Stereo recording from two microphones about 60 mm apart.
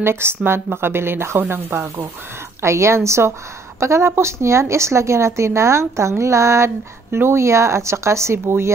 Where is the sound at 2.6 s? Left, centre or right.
Right.